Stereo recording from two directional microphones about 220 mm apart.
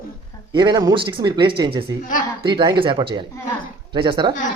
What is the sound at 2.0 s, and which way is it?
Speech, 40° left (ahead or behind).